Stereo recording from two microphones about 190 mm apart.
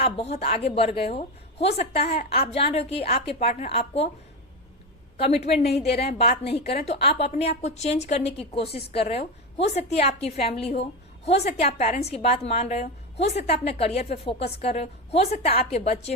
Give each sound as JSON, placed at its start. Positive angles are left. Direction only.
{"t": 0.0, "sound": "a woman's voice", "side_deg": 35}
{"t": 5.2, "sound": "a woman's voice", "side_deg": 35}
{"t": 5.6, "sound": "a woman's voice", "side_deg": 60}
{"t": 6.8, "sound": "a woman's voice", "side_deg": 30}